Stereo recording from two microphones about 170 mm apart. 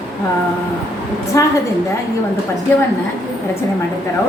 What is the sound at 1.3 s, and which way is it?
Speech, 20° left (ahead or behind).